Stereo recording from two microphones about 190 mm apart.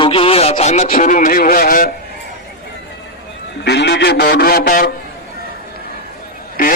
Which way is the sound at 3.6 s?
60° left (ahead or behind).